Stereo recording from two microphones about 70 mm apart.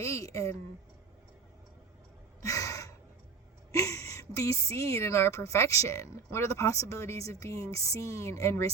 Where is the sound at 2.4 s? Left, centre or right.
Left.